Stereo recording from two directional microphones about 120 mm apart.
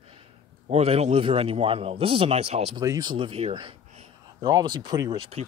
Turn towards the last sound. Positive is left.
turn(degrees=-35)  # may be behind; listen again after turning